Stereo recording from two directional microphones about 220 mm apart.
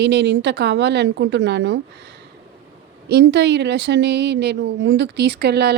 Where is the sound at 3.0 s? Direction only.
50° right (ahead or behind).